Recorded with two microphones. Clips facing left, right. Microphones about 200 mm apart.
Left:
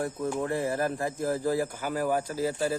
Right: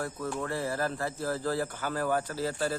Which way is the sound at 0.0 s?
20° left (ahead or behind).